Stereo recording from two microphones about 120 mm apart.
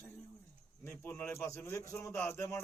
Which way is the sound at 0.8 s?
20° left (ahead or behind).